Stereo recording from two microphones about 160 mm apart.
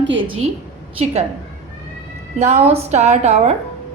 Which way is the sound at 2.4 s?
40° right (ahead or behind).